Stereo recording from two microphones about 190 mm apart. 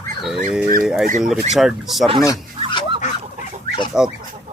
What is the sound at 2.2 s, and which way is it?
Fowl, 20° left (ahead or behind).